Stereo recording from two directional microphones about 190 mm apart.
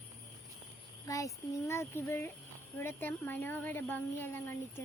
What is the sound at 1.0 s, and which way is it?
A child's voice, 15° left (ahead or behind).